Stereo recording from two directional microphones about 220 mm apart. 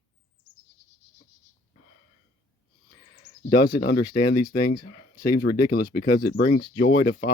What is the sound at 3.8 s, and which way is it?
Speech, 45° left (ahead or behind).